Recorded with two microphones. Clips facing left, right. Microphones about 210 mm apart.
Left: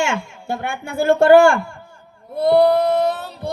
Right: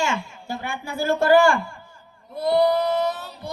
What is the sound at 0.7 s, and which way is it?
Speech, 50° left (ahead or behind).